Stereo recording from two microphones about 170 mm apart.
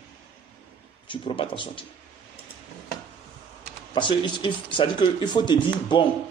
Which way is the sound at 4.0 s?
30° left (ahead or behind).